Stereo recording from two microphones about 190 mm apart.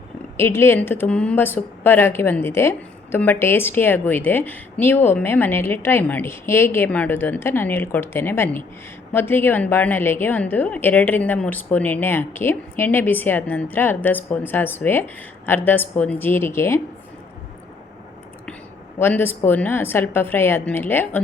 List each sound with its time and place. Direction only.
0.3 s a woman's voice: 15° left (ahead or behind)
18.9 s a woman's voice: 10° left (ahead or behind)